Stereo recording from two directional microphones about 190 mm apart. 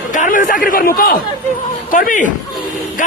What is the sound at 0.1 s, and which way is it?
A man's voice, 45° left (ahead or behind).